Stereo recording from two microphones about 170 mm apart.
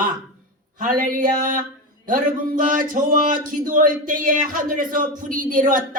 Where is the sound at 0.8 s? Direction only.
55° right (ahead or behind).